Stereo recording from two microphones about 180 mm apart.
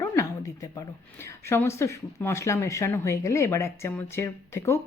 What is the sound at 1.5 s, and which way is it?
Speech, 15° left (ahead or behind).